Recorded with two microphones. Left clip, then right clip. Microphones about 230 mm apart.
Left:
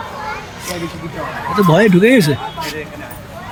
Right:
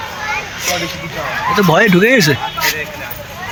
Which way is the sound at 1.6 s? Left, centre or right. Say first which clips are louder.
Even; centre.